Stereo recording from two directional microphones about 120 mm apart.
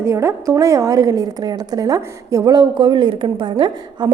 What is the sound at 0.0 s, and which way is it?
A woman's voice, 25° right (ahead or behind).